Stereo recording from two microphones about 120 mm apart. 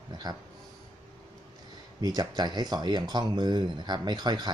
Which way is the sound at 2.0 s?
35° right (ahead or behind).